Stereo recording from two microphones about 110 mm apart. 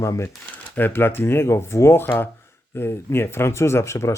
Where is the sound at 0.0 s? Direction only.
30° left (ahead or behind).